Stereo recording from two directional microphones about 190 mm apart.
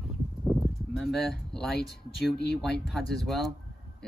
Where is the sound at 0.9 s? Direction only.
Centre (ahead or behind).